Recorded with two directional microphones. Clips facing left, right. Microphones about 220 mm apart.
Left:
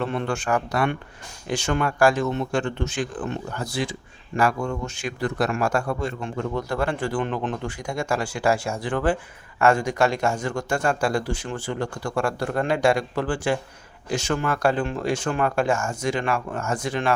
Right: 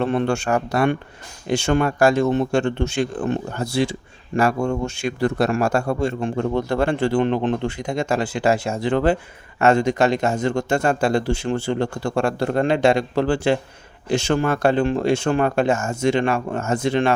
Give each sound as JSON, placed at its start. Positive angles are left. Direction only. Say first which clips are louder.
{"t": 0.0, "sound": "speech", "louder": "right 6 dB", "side_deg": -30}